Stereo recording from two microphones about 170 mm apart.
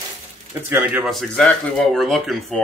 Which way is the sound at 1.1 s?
5° left (ahead or behind).